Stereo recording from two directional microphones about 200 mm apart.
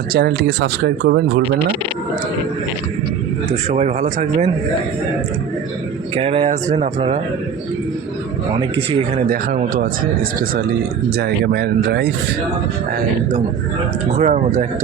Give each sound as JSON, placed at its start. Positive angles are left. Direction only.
{"t": 0.1, "sound": "speech", "side_deg": -55}
{"t": 3.7, "sound": "speech", "side_deg": -35}
{"t": 6.1, "sound": "speech", "side_deg": -30}
{"t": 8.5, "sound": "speech", "side_deg": -25}
{"t": 9.3, "sound": "speech", "side_deg": -45}
{"t": 11.2, "sound": "speech", "side_deg": -50}
{"t": 14.2, "sound": "speech", "side_deg": -35}